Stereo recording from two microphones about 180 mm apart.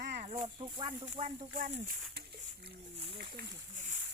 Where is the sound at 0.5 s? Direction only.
25° right (ahead or behind).